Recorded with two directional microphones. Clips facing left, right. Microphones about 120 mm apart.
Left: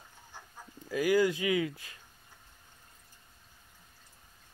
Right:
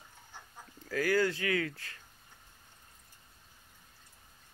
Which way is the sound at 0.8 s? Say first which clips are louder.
Left 3 dB; 15° left (ahead or behind).